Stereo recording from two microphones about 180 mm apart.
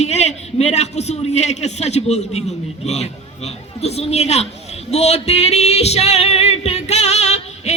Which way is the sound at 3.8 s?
35° left (ahead or behind).